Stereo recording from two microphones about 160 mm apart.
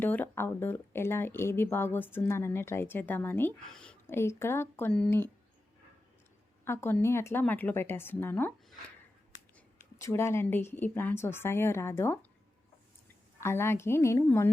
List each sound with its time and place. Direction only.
0.0 s speech: 10° left (ahead or behind)
6.7 s speech: 15° left (ahead or behind)
10.0 s speech: 15° left (ahead or behind)
13.4 s speech: 15° left (ahead or behind)